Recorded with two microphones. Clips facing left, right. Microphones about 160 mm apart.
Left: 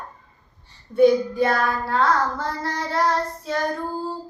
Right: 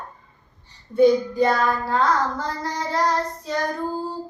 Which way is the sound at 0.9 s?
20° right (ahead or behind).